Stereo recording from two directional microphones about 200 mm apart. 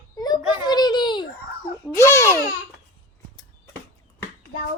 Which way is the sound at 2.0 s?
15° left (ahead or behind).